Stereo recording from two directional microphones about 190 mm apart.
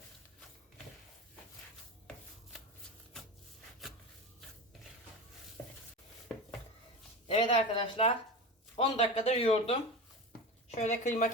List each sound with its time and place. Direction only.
7.3 s speech: 30° left (ahead or behind)
10.8 s speech: 40° left (ahead or behind)